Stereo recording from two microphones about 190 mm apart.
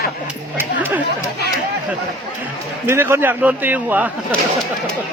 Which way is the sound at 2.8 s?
15° right (ahead or behind).